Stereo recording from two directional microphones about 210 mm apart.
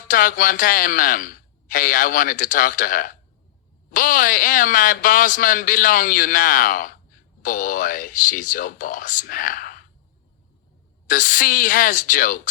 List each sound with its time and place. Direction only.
0.1 s a man's voice: 40° left (ahead or behind)
11.0 s a man's voice: 40° left (ahead or behind)